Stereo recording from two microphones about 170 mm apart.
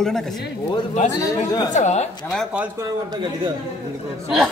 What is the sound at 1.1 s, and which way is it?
Speech, 20° left (ahead or behind).